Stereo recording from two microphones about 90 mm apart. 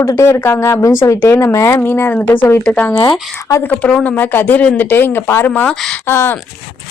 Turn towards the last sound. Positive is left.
turn(degrees=25)  # may be behind; listen again after turning